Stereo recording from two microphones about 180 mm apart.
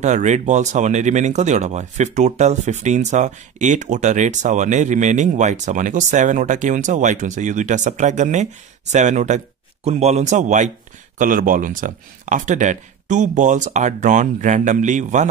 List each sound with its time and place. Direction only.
0.0 s speech: 40° right (ahead or behind)